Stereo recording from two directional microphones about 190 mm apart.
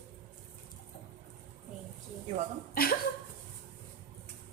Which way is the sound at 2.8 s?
50° left (ahead or behind).